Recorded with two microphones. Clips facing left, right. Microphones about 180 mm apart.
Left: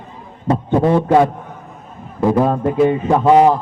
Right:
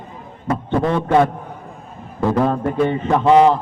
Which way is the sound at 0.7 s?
15° left (ahead or behind).